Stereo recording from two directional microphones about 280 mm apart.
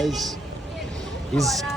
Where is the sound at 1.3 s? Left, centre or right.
Centre.